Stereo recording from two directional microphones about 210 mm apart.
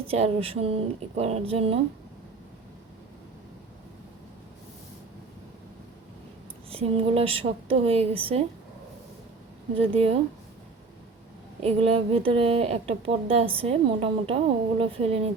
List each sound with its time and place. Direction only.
0.1 s a woman's voice: 25° right (ahead or behind)
6.7 s a woman's voice: 25° right (ahead or behind)
9.9 s a woman's voice: 30° right (ahead or behind)
11.6 s a woman's voice: 30° right (ahead or behind)